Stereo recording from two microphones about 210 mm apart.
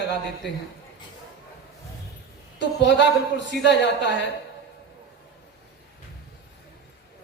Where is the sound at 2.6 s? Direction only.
55° left (ahead or behind).